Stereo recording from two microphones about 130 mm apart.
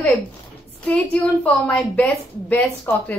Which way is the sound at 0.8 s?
10° left (ahead or behind).